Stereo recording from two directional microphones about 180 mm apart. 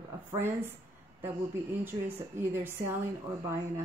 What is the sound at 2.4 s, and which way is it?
Speech, 10° right (ahead or behind).